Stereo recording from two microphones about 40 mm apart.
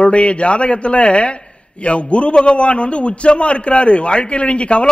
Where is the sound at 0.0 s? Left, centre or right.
Left.